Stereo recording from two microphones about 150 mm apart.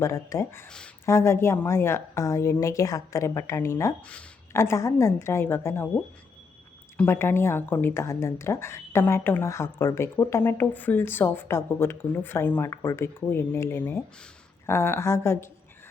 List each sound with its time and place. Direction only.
0.0 s a woman's voice: 20° left (ahead or behind)
6.9 s a woman's voice: 15° left (ahead or behind)